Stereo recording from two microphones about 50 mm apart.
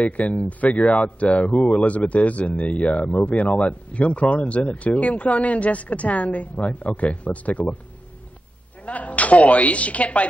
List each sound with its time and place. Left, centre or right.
0.0 s speech: left
8.8 s a woman's voice: left